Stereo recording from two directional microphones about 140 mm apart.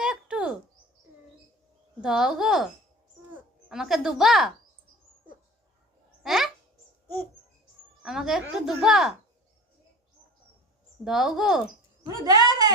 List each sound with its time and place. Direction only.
0.0 s bird: 5° right (ahead or behind)
2.0 s a woman's voice: 5° right (ahead or behind)
6.2 s a sound: centre (ahead or behind)
8.0 s a woman's voice: 5° right (ahead or behind)
11.0 s a woman's voice: 5° right (ahead or behind)
12.0 s speech: 25° right (ahead or behind)